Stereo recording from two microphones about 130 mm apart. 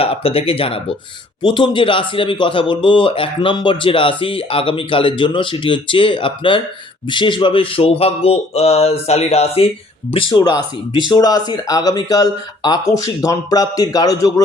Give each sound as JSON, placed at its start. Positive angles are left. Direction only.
{"t": 0.0, "sound": "speech", "side_deg": 45}
{"t": 10.1, "sound": "speech", "side_deg": 40}